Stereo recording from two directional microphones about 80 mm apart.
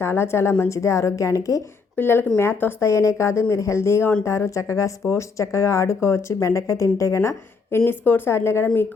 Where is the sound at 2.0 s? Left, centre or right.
Left.